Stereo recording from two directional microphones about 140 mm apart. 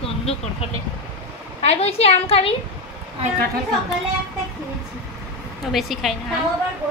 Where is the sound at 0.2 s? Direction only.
45° left (ahead or behind).